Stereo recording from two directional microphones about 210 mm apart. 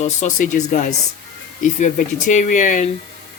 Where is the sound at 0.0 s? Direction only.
35° left (ahead or behind).